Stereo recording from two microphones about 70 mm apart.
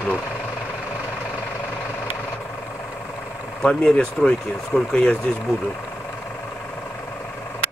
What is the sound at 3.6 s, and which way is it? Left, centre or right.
Speech, centre.